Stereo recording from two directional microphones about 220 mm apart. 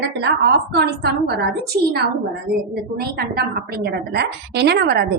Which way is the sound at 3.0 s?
45° right (ahead or behind).